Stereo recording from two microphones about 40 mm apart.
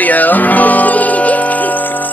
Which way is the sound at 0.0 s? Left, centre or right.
Left.